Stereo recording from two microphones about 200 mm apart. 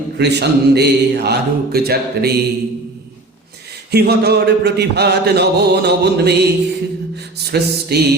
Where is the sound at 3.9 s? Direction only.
55° right (ahead or behind).